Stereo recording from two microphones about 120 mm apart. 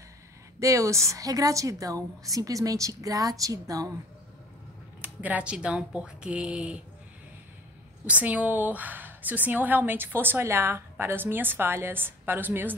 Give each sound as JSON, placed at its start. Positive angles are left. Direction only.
{"t": 0.6, "sound": "a woman's voice", "side_deg": -25}
{"t": 5.0, "sound": "a woman's voice", "side_deg": -15}
{"t": 8.1, "sound": "a woman's voice", "side_deg": -15}